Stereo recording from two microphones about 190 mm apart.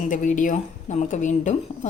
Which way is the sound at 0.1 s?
40° left (ahead or behind).